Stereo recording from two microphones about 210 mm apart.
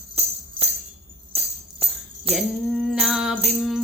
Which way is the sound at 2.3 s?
30° right (ahead or behind).